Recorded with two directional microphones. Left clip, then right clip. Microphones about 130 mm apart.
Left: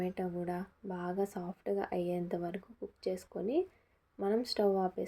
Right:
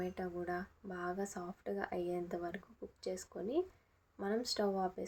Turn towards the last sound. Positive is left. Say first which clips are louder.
# left 5 dB
turn(degrees=30)  # may be behind; listen again after turning